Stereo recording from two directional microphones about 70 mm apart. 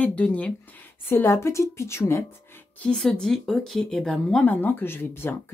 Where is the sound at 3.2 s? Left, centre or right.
Centre.